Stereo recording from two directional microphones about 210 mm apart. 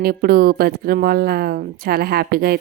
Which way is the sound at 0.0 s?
45° right (ahead or behind).